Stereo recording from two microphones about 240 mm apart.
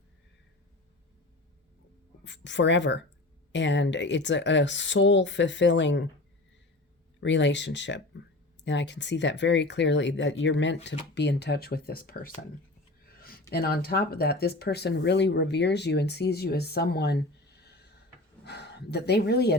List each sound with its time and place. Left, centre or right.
2.2 s speech: left
7.2 s speech: left
13.5 s speech: left